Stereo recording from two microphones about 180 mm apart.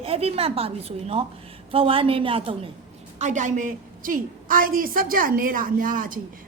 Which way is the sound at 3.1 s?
40° right (ahead or behind).